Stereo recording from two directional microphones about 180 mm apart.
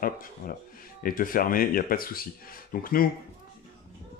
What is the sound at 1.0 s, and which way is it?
Speech, 50° left (ahead or behind).